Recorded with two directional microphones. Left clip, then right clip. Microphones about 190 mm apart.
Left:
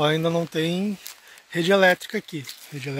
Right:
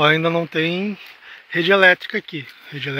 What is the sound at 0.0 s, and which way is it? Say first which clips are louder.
Speech: right 6 dB; centre (ahead or behind).